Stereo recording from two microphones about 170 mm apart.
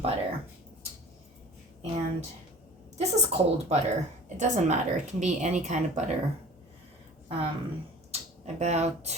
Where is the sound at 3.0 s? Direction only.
40° right (ahead or behind).